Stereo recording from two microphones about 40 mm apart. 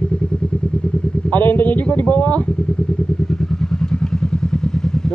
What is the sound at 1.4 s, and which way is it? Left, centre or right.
Speech, left.